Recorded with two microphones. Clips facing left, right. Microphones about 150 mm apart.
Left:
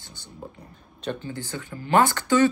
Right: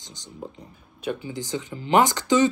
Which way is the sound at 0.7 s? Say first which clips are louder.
Right 1 dB; 5° right (ahead or behind).